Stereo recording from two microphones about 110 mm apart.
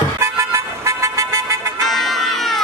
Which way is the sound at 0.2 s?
25° right (ahead or behind).